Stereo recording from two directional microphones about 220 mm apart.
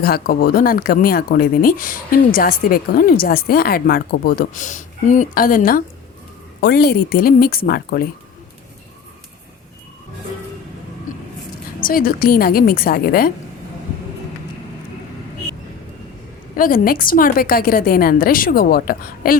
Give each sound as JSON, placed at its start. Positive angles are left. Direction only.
{"t": 0.0, "sound": "a woman's voice", "side_deg": 45}
{"t": 11.8, "sound": "speech", "side_deg": 40}
{"t": 16.6, "sound": "speech", "side_deg": 40}